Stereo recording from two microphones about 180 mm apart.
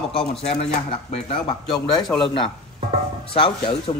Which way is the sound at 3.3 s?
30° left (ahead or behind).